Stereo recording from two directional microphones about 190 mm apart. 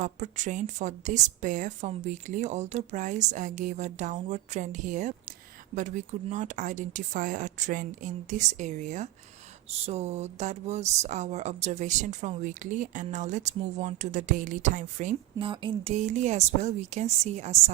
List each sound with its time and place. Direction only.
0.0 s speech: 40° right (ahead or behind)